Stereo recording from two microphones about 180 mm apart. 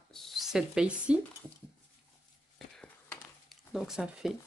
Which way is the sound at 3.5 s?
Centre (ahead or behind).